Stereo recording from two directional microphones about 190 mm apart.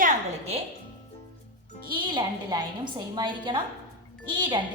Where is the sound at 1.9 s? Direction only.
25° right (ahead or behind).